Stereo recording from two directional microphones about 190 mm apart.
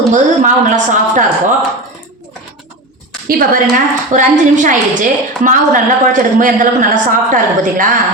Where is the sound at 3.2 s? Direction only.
45° right (ahead or behind).